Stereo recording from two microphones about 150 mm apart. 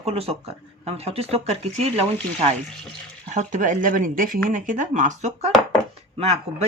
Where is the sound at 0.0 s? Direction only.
40° right (ahead or behind).